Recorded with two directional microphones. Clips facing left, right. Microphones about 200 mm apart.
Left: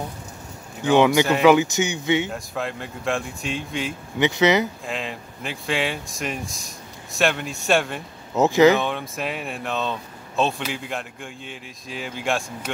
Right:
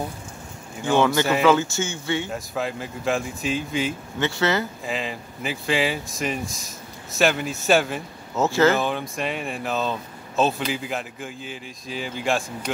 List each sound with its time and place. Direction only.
0.8 s speech: 15° left (ahead or behind)
2.3 s speech: centre (ahead or behind)
4.2 s speech: 20° left (ahead or behind)
4.8 s speech: centre (ahead or behind)
8.4 s speech: 15° left (ahead or behind)
8.7 s speech: centre (ahead or behind)